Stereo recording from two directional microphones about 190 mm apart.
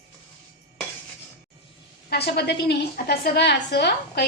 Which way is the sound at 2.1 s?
60° left (ahead or behind).